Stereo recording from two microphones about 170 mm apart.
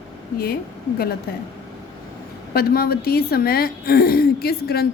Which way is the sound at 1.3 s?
65° left (ahead or behind).